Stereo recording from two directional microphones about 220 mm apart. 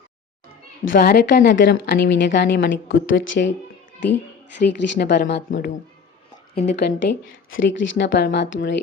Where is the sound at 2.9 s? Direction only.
60° left (ahead or behind).